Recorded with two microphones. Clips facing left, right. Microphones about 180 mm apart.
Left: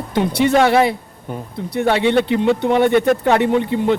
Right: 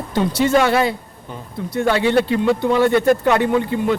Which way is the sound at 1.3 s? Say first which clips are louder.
Left 1 dB; 65° left (ahead or behind).